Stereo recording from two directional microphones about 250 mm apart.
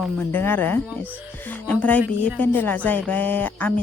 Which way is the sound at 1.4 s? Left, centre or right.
Centre.